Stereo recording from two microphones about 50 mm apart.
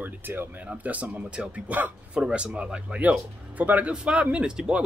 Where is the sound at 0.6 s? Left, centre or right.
Right.